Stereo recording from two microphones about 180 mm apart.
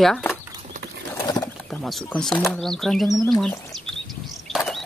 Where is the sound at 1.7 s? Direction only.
Centre (ahead or behind).